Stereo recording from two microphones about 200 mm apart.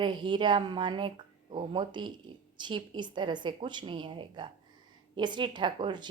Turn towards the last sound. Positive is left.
turn(degrees=-25)  # may be behind; listen again after turning